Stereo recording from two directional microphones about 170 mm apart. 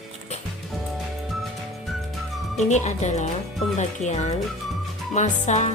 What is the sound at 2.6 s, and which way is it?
Speech, 45° left (ahead or behind).